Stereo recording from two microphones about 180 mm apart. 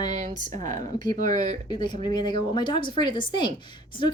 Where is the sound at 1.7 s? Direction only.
25° left (ahead or behind).